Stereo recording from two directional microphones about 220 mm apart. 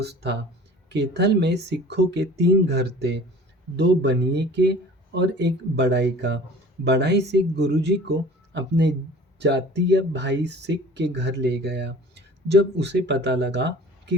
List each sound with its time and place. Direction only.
0.0 s speech: 50° right (ahead or behind)